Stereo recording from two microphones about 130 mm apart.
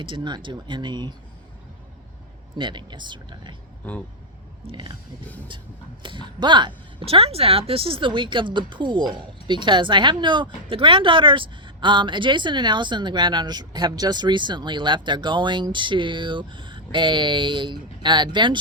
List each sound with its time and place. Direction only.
0.0 s speech: 40° right (ahead or behind)
2.6 s speech: 35° right (ahead or behind)
4.6 s speech: 35° right (ahead or behind)
6.0 s speech: 40° right (ahead or behind)